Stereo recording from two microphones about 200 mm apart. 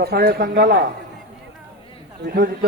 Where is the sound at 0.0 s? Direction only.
50° right (ahead or behind).